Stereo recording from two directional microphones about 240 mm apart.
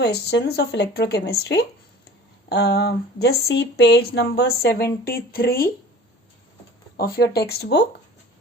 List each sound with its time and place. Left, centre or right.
0.0 s speech: left
6.9 s speech: left